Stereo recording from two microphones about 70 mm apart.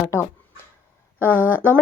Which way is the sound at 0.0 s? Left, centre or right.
Left.